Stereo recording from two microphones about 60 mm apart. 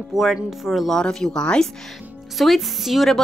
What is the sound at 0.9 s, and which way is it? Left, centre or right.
Speech, centre.